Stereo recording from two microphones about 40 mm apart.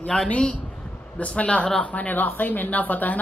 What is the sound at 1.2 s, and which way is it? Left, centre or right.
Speech, left.